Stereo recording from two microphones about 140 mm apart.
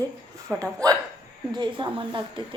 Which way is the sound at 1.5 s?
35° right (ahead or behind).